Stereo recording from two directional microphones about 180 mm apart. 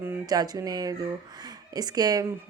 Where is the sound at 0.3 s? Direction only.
20° right (ahead or behind).